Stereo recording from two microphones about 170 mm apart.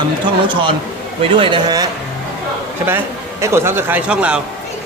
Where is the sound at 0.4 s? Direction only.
30° right (ahead or behind).